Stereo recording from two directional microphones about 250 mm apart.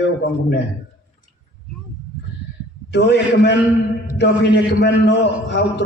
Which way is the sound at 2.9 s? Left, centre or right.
Left.